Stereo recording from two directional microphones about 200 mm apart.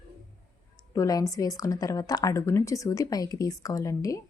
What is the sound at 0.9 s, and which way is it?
A woman's voice, 15° left (ahead or behind).